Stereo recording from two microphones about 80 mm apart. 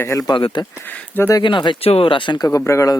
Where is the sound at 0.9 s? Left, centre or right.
Left.